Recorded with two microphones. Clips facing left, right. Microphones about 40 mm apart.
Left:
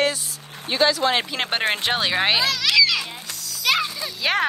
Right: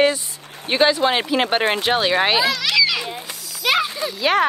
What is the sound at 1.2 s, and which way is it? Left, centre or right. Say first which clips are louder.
Children playing: right 5 dB; centre.